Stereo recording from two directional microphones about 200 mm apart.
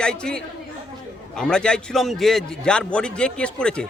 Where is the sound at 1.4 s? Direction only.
5° left (ahead or behind).